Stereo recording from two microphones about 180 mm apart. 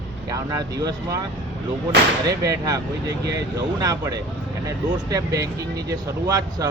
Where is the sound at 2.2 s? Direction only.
20° right (ahead or behind).